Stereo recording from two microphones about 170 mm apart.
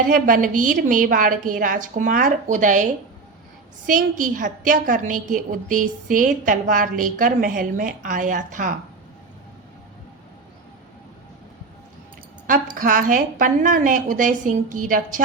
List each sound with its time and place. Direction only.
0.1 s a woman's voice: 50° right (ahead or behind)
12.5 s a woman's voice: 55° right (ahead or behind)